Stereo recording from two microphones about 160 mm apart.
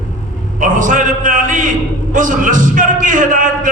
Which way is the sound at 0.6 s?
55° right (ahead or behind).